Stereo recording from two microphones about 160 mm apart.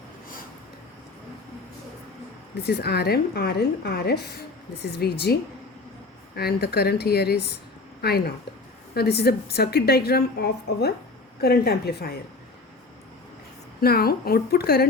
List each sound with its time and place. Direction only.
2.6 s a woman's voice: 90° left
13.8 s a woman's voice: 75° left (ahead or behind)